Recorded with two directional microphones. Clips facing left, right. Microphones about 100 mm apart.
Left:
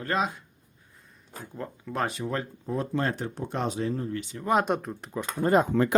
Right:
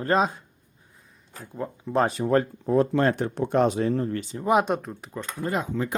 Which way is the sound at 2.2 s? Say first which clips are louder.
Right 9 dB; 50° right (ahead or behind).